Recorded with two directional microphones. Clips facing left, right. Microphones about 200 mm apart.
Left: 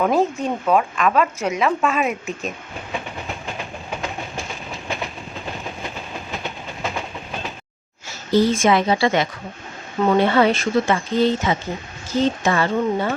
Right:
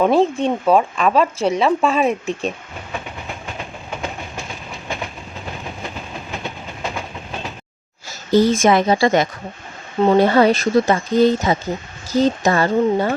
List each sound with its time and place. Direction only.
0.0 s speech: 30° right (ahead or behind)
8.3 s speech: 45° right (ahead or behind)